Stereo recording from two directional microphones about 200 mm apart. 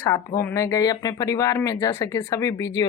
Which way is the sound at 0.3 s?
15° left (ahead or behind).